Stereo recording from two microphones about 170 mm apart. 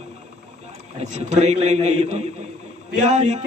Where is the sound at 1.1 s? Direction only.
40° right (ahead or behind).